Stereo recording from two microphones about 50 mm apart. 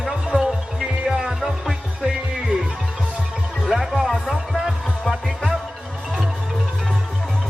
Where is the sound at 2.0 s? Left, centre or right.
Centre.